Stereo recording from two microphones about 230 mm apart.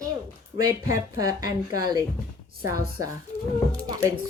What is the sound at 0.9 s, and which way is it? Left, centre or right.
Speech, centre.